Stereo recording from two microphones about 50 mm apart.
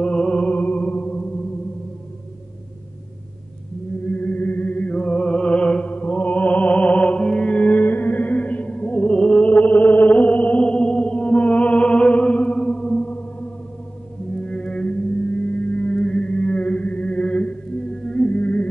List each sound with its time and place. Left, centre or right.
0.0 s music: left
4.0 s music: left
10.6 s music: left
14.3 s music: centre